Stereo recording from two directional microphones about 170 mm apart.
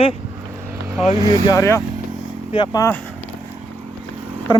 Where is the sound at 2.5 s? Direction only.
30° left (ahead or behind).